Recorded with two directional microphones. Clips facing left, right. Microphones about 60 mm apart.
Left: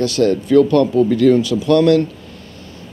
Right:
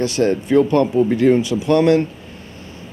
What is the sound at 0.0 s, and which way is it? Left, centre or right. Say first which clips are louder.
Speech: left 2 dB; right.